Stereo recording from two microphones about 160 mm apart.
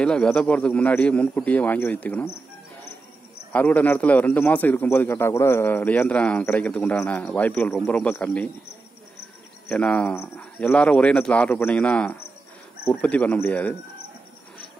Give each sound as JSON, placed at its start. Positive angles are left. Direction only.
{"t": 0.0, "sound": "speech", "side_deg": 5}
{"t": 3.5, "sound": "speech", "side_deg": 10}
{"t": 9.7, "sound": "speech", "side_deg": 5}